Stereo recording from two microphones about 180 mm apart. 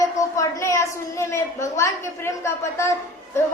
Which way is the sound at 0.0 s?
15° left (ahead or behind).